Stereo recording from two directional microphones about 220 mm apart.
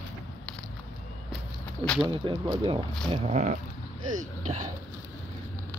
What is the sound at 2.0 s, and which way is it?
Speech, 20° right (ahead or behind).